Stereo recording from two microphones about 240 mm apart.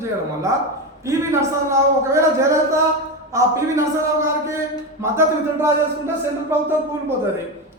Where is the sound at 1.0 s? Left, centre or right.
Centre.